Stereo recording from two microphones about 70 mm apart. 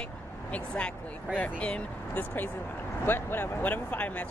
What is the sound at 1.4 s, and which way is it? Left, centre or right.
Speech, left.